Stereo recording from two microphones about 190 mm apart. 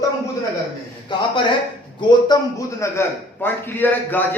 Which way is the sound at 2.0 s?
25° left (ahead or behind).